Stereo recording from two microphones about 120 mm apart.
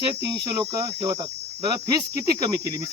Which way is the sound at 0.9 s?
45° right (ahead or behind).